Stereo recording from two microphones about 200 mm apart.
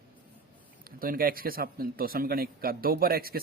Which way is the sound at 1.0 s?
45° right (ahead or behind).